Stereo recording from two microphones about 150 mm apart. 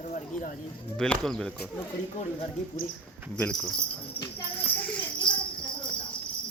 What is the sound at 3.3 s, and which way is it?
Speech, 5° left (ahead or behind).